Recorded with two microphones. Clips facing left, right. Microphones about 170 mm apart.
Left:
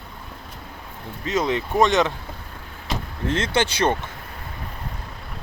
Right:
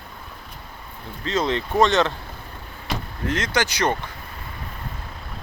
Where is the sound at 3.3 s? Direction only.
25° left (ahead or behind).